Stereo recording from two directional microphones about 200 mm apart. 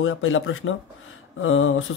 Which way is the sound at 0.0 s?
80° left.